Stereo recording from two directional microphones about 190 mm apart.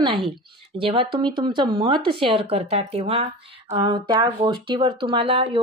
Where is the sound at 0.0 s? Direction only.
25° right (ahead or behind).